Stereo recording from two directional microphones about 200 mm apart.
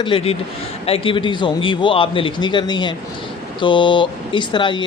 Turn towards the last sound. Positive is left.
turn(degrees=25)  # may be behind; listen again after turning